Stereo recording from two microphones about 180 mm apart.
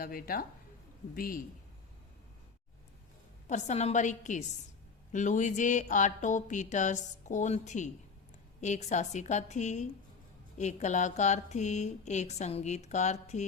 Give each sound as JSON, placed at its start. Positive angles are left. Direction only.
{"t": 0.0, "sound": "speech", "side_deg": 55}
{"t": 3.4, "sound": "speech", "side_deg": 40}